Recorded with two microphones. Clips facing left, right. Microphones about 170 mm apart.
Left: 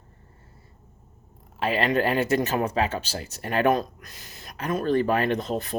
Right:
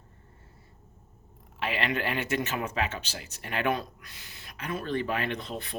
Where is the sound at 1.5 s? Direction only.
40° left (ahead or behind).